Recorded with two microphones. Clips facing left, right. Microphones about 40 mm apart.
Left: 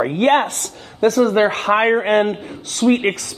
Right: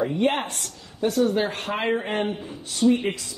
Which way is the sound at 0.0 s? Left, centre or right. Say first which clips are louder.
Left 8 dB; left.